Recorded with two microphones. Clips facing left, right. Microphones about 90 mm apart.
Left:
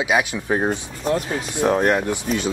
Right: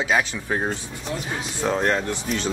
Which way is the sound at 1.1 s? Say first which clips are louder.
Left 9 dB; 45° left (ahead or behind).